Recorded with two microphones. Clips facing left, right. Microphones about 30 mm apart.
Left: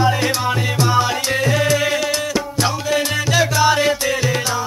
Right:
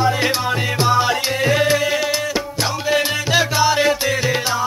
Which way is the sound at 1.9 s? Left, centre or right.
Centre.